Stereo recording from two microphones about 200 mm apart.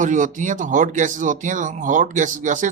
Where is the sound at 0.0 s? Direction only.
40° right (ahead or behind).